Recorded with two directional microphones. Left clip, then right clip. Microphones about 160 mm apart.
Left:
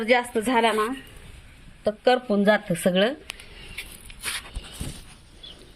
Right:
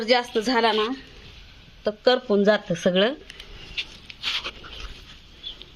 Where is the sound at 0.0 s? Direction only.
5° right (ahead or behind).